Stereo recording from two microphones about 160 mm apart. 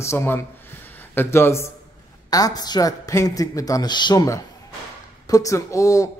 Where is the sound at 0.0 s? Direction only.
15° left (ahead or behind).